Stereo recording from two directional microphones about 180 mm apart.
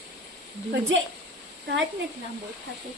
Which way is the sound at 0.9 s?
90° right.